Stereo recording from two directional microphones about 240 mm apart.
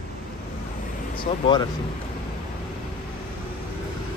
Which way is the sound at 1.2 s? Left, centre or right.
Centre.